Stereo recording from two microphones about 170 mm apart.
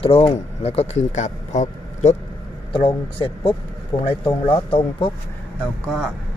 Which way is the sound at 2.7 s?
35° left (ahead or behind).